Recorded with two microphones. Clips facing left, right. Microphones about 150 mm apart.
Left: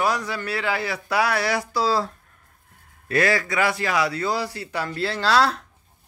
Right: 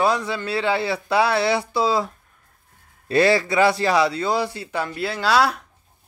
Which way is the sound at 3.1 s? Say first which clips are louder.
Right 4 dB; 30° right (ahead or behind).